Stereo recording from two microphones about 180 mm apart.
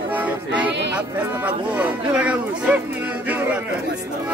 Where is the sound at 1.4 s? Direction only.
10° right (ahead or behind).